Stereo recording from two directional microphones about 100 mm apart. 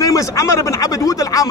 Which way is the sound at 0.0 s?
35° left (ahead or behind).